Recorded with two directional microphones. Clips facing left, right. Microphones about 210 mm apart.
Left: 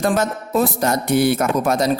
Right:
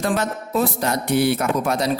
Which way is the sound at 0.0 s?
45° left (ahead or behind).